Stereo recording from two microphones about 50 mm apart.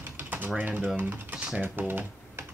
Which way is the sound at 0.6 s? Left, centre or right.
Right.